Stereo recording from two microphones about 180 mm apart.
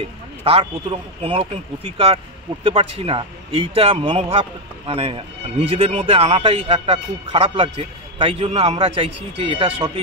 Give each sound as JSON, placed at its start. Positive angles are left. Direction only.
{"t": 0.4, "sound": "a man's voice", "side_deg": -30}
{"t": 2.6, "sound": "a man's voice", "side_deg": -35}